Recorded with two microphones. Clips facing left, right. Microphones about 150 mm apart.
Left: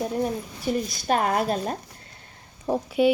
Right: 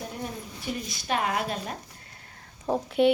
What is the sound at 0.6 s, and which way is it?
Speech, 40° left (ahead or behind).